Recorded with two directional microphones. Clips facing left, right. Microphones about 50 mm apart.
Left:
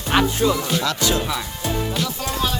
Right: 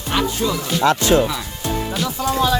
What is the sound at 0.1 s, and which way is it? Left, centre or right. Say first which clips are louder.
Music: left 2 dB; centre.